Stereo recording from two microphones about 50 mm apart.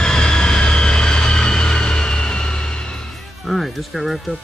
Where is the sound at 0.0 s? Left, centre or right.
Centre.